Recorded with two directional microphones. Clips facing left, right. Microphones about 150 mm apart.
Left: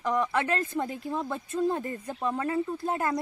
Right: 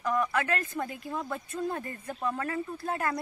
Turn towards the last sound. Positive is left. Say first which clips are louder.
# left 3 dB
turn(degrees=25)  # may be behind; listen again after turning